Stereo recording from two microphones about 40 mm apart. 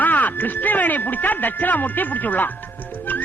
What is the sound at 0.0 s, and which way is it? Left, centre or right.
Music, left.